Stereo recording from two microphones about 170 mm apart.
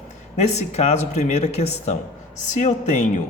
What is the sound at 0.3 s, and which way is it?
Speech, 40° left (ahead or behind).